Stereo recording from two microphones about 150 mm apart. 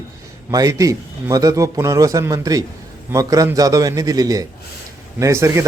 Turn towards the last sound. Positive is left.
turn(degrees=-20)  # may be behind; listen again after turning